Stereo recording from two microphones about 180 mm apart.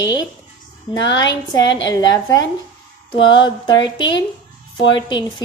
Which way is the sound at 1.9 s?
20° left (ahead or behind).